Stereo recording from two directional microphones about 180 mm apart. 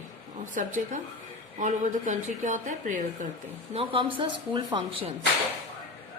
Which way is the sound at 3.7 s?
30° right (ahead or behind).